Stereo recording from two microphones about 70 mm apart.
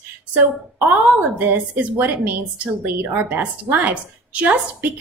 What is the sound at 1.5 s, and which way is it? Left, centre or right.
A woman's voice, right.